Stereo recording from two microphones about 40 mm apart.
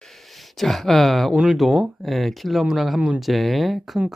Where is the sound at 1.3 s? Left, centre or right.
Centre.